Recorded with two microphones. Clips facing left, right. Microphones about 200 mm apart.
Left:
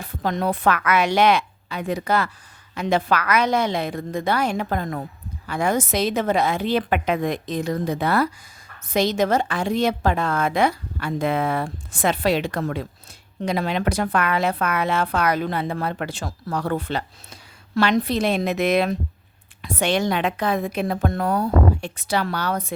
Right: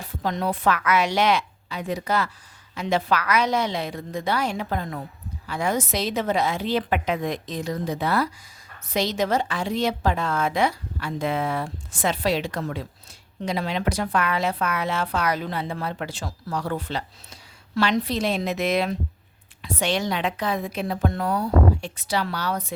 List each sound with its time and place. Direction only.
0.0 s a woman's voice: 55° left (ahead or behind)